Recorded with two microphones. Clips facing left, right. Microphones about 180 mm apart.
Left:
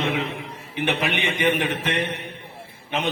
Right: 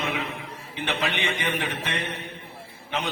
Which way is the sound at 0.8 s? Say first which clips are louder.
Left 3 dB; 15° left (ahead or behind).